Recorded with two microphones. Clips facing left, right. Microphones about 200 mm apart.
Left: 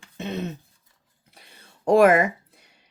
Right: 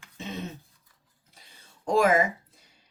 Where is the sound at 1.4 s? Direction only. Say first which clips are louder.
Left 4 dB; 65° left (ahead or behind).